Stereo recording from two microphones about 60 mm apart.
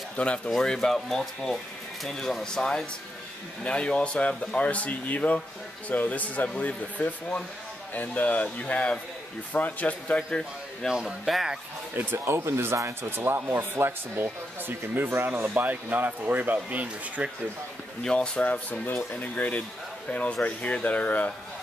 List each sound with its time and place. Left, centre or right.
0.1 s speech: centre
10.9 s speech: centre
12.0 s speech: right
15.0 s speech: right
18.0 s speech: centre